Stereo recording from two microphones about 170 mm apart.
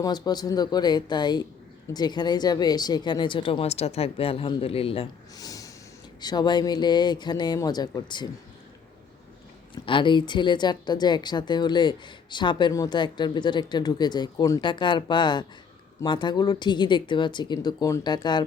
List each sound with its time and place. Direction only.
0.0 s a woman's voice: 25° left (ahead or behind)
5.4 s snort: 20° left (ahead or behind)
6.1 s a woman's voice: 25° left (ahead or behind)
9.7 s a woman's voice: 30° left (ahead or behind)